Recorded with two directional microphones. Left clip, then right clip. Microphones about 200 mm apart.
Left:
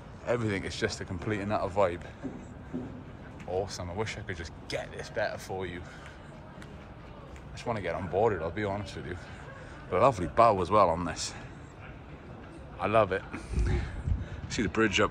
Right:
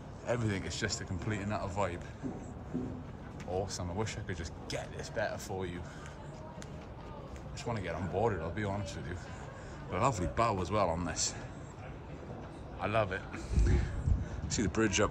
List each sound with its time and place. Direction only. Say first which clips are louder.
0.3 s speech: left 5 dB; 10° right (ahead or behind)
3.5 s speech: left 4 dB; 15° right (ahead or behind)
7.6 s a man's voice: left 6 dB; 10° right (ahead or behind)
12.7 s a man's voice: left 7 dB; centre (ahead or behind)